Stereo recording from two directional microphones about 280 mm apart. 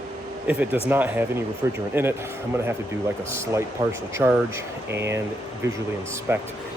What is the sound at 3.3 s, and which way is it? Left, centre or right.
Speech, centre.